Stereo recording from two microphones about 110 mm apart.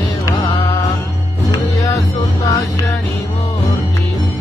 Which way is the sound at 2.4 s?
30° left (ahead or behind).